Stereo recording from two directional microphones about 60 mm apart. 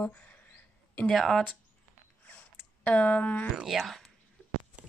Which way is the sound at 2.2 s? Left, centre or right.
Left.